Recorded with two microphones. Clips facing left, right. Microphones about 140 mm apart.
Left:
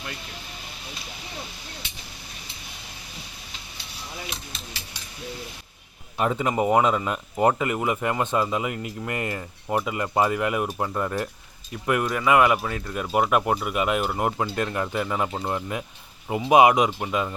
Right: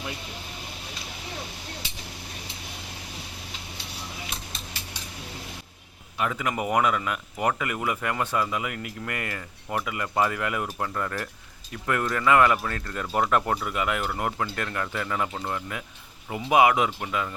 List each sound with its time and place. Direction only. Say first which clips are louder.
6.1 s speech: left 5 dB; 30° left (ahead or behind)